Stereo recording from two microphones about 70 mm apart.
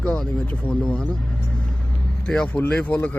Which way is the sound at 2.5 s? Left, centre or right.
Centre.